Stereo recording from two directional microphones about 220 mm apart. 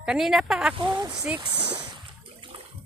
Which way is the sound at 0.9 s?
15° right (ahead or behind).